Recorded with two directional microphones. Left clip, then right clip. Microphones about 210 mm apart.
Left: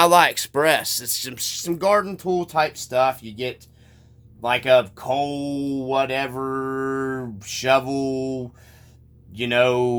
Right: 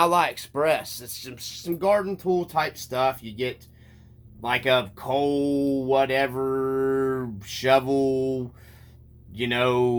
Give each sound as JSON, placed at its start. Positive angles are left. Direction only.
{"t": 0.0, "sound": "speech", "side_deg": 50}